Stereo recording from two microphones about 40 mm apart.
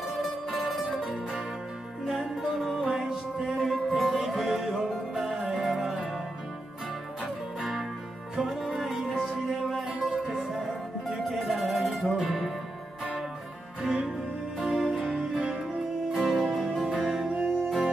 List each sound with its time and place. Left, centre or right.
0.0 s music: centre
8.4 s music: centre
9.8 s music: centre
10.2 s music: centre
13.8 s music: centre
16.3 s music: centre